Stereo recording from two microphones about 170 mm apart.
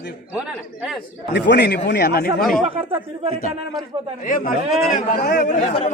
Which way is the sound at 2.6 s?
35° right (ahead or behind).